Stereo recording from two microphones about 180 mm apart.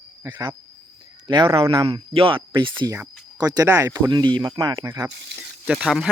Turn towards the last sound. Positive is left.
turn(degrees=0)  # may be behind; listen again after turning